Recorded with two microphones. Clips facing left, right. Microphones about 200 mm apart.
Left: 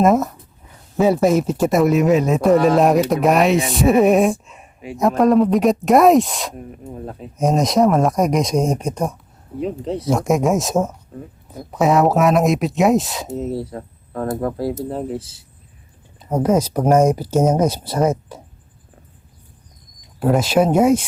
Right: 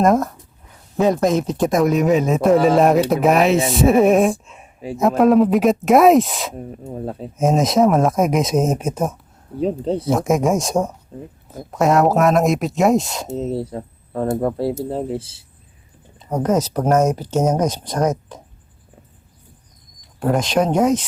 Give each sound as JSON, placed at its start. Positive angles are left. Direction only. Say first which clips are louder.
{"t": 0.0, "sound": "speech", "louder": "left 1 dB", "side_deg": 5}
{"t": 6.6, "sound": "speech", "louder": "right 3 dB", "side_deg": -30}
{"t": 7.3, "sound": "speech", "louder": "even", "side_deg": 0}
{"t": 9.6, "sound": "speech", "louder": "right 3 dB", "side_deg": -30}
{"t": 10.1, "sound": "speech", "louder": "left 1 dB", "side_deg": 0}
{"t": 13.3, "sound": "speech", "louder": "right 1 dB", "side_deg": -25}
{"t": 16.3, "sound": "speech", "louder": "left 2 dB", "side_deg": 10}
{"t": 20.1, "sound": "speech", "louder": "left 2 dB", "side_deg": 5}